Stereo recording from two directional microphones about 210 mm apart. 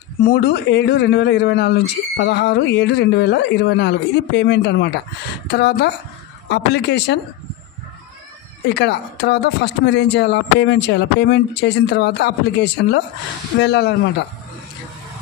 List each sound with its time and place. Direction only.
0.2 s speech: 50° left (ahead or behind)
8.7 s speech: 55° left (ahead or behind)